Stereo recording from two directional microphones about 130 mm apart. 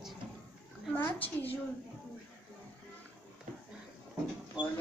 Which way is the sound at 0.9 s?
20° left (ahead or behind).